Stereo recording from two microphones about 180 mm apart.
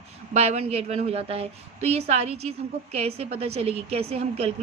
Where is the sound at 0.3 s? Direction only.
35° right (ahead or behind).